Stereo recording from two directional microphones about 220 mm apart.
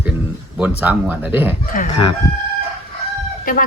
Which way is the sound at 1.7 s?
40° left (ahead or behind).